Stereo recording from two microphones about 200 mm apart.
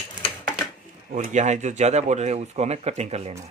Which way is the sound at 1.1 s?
40° right (ahead or behind).